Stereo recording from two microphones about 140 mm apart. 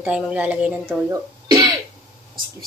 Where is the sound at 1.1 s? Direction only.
25° right (ahead or behind).